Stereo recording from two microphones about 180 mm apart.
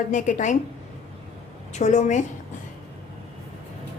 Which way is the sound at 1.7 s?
40° left (ahead or behind).